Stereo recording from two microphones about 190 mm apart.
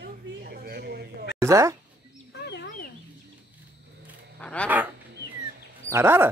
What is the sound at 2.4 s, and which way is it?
Fowl, 65° left (ahead or behind).